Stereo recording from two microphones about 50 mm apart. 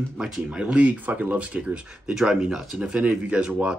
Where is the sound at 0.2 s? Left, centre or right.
Centre.